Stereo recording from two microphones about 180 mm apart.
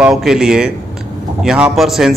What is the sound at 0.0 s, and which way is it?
A man's voice, 5° right (ahead or behind).